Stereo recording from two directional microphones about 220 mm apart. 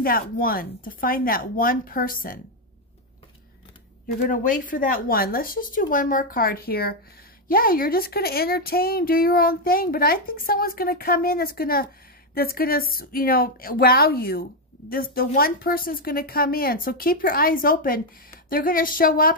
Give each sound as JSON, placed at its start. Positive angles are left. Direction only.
{"t": 0.0, "sound": "speech", "side_deg": 40}
{"t": 4.2, "sound": "speech", "side_deg": 35}